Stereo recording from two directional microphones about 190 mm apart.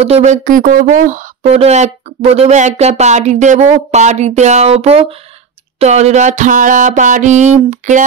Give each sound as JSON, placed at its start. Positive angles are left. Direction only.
{"t": 0.0, "sound": "speech", "side_deg": -35}